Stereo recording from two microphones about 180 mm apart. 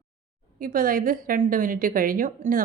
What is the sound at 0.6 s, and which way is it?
A woman's voice, 50° right (ahead or behind).